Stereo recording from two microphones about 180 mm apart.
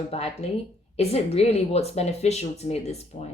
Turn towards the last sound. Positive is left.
turn(degrees=35)  # may be behind; listen again after turning